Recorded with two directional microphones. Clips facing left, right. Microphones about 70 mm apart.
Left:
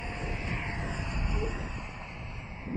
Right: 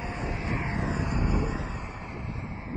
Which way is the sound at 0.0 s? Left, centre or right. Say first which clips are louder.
Right 4 dB; right.